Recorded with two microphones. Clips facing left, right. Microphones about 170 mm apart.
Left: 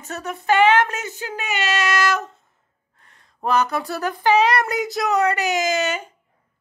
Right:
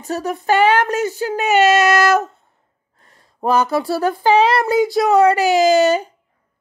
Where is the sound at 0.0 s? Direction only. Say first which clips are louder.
Right 7 dB; 35° right (ahead or behind).